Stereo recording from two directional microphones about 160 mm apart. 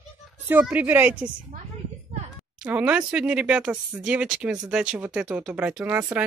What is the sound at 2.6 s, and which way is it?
Speech, 10° right (ahead or behind).